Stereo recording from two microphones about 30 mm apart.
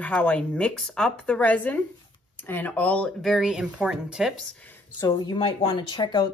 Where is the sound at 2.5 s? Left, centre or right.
Left.